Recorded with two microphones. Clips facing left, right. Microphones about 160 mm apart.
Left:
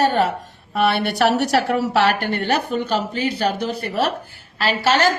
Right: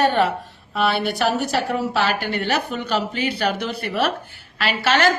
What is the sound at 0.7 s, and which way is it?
A woman's voice, 60° left (ahead or behind).